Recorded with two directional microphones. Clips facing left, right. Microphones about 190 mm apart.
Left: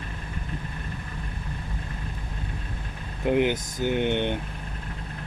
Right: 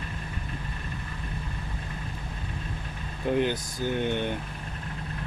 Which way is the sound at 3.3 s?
15° left (ahead or behind).